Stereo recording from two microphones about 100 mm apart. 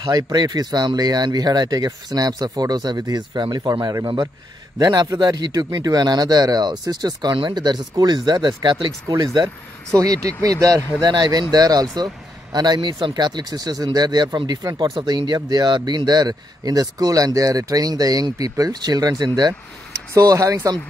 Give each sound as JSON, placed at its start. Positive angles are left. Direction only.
{"t": 0.0, "sound": "a man's voice", "side_deg": -40}